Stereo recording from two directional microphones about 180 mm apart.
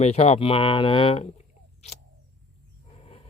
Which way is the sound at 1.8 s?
35° left (ahead or behind).